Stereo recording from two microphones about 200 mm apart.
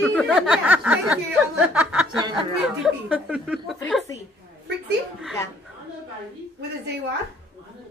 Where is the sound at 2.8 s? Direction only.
5° right (ahead or behind).